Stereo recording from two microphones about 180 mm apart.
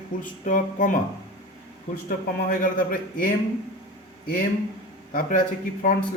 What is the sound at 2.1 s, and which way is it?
A man's voice, 50° left (ahead or behind).